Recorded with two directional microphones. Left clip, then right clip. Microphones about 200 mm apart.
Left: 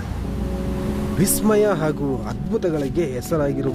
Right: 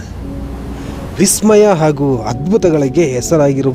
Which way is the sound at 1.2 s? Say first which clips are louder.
Right 10 dB; 35° right (ahead or behind).